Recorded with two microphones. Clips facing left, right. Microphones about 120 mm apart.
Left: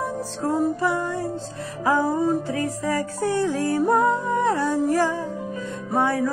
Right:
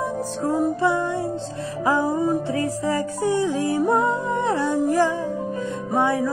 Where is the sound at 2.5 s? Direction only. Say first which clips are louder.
Right 2 dB; 30° right (ahead or behind).